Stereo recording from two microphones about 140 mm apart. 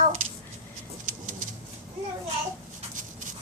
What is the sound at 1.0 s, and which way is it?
Pigeon, 65° right (ahead or behind).